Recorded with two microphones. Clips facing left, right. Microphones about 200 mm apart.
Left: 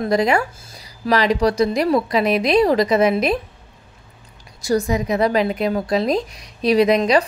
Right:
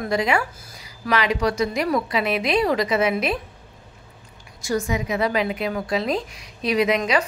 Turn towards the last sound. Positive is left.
turn(degrees=35)  # may be behind; listen again after turning